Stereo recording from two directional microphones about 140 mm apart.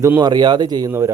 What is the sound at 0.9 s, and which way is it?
Speech, 20° right (ahead or behind).